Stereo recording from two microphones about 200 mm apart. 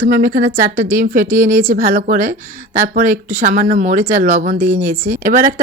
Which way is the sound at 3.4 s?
40° right (ahead or behind).